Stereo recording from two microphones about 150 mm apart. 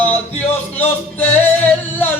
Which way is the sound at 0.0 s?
10° left (ahead or behind).